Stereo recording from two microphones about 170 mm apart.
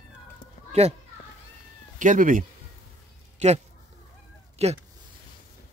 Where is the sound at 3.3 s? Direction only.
40° right (ahead or behind).